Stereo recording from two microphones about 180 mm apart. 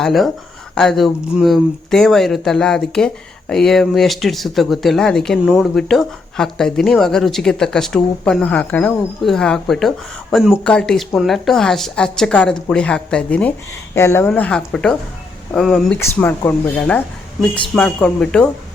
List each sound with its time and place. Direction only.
0.0 s speech: centre (ahead or behind)
16.0 s speech: 15° left (ahead or behind)